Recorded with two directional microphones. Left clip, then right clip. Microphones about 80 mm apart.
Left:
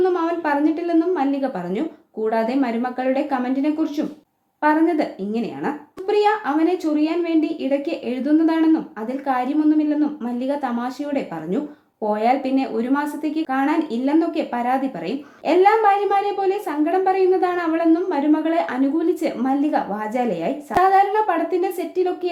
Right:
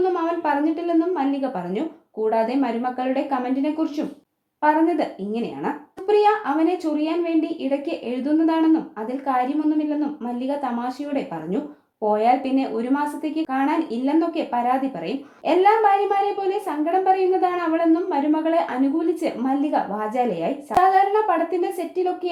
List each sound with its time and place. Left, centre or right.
0.0 s a woman's voice: right